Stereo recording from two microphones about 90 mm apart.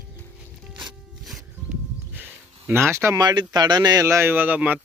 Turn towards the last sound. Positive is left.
turn(degrees=-20)  # may be behind; listen again after turning